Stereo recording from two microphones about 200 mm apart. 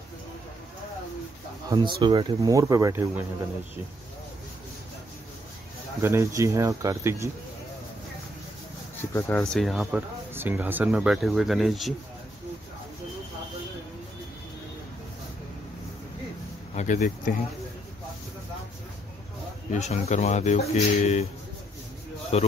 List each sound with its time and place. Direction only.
1.7 s speech: 25° right (ahead or behind)
5.9 s speech: 15° right (ahead or behind)
9.1 s speech: 10° left (ahead or behind)
16.7 s speech: 35° left (ahead or behind)
19.7 s speech: 35° left (ahead or behind)
22.3 s speech: 30° left (ahead or behind)